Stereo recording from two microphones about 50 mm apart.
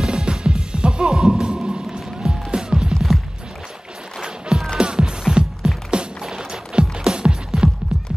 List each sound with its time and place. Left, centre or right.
0.0 s music: centre
4.2 s music: centre